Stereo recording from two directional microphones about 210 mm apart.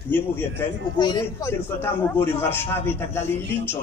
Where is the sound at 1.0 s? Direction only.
20° left (ahead or behind).